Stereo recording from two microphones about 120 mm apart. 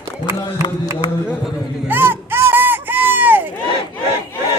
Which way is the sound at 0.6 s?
35° left (ahead or behind).